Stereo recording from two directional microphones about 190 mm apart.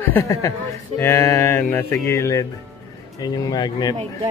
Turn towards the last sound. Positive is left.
turn(degrees=20)  # may be behind; listen again after turning